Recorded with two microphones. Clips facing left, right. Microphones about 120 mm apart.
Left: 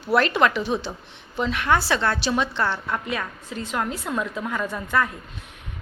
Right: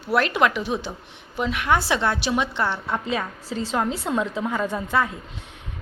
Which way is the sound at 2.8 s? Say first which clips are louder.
Right 2 dB; 25° right (ahead or behind).